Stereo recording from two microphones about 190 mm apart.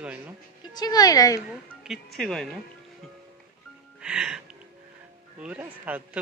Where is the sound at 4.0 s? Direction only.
5° right (ahead or behind).